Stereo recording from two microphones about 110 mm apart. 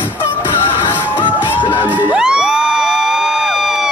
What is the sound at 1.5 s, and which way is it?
Crowd, 15° left (ahead or behind).